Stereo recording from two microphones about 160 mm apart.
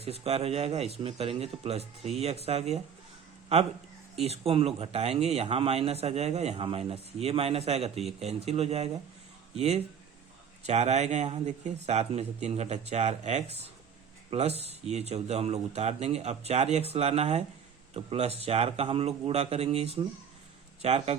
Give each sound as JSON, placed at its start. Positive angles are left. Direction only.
{"t": 0.0, "sound": "speech", "side_deg": -40}